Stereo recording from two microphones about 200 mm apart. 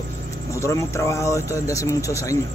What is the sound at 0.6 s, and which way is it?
Speech, 15° left (ahead or behind).